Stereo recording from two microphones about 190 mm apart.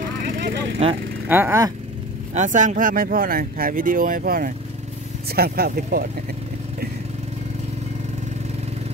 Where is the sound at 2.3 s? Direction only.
40° right (ahead or behind).